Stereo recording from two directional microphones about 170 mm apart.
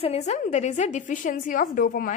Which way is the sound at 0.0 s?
40° left (ahead or behind).